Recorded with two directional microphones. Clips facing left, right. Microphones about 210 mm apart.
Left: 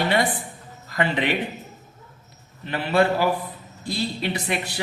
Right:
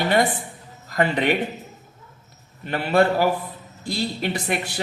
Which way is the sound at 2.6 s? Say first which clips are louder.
Right 2 dB; 45° right (ahead or behind).